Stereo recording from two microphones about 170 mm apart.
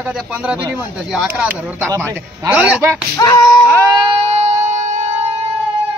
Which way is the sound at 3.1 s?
20° left (ahead or behind).